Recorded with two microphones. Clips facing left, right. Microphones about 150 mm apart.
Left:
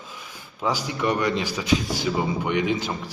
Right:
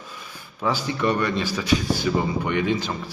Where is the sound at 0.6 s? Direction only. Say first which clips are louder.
Right 1 dB; 15° left (ahead or behind).